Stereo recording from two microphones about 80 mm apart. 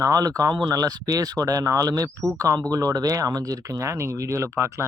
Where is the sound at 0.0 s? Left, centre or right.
Right.